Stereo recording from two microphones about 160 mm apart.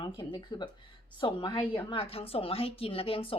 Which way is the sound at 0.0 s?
30° left (ahead or behind).